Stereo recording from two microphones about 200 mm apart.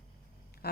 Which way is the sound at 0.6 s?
50° left (ahead or behind).